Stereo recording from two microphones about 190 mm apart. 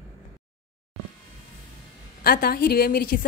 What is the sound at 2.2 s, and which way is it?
A woman's voice, 50° left (ahead or behind).